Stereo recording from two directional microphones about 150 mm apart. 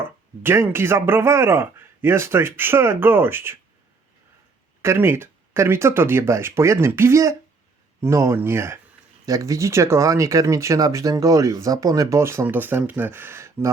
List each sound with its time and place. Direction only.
0.4 s speech: 15° right (ahead or behind)
4.8 s speech: 15° right (ahead or behind)